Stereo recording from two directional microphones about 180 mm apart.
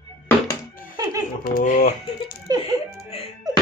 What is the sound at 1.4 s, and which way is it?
Speech, 50° left (ahead or behind).